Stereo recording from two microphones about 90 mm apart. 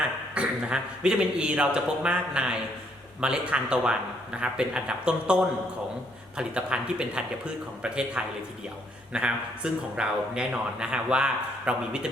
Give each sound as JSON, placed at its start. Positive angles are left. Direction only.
{"t": 0.3, "sound": "speech", "side_deg": -10}